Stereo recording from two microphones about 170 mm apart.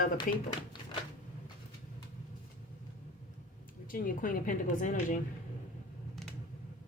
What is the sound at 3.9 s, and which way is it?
A woman's voice, 55° left (ahead or behind).